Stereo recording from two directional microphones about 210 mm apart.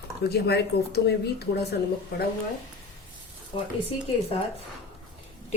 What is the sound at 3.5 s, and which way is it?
Speech, 30° left (ahead or behind).